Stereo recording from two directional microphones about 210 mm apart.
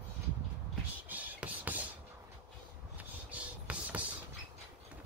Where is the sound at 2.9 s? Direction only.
5° right (ahead or behind).